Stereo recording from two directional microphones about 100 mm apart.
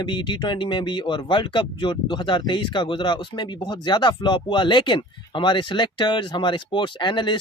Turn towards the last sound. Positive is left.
turn(degrees=50)  # may be behind; listen again after turning